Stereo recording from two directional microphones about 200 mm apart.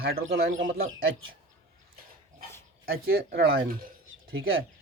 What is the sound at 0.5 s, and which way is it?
Speech, 70° right (ahead or behind).